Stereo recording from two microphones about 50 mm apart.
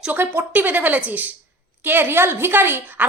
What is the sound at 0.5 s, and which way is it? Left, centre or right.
Speech, right.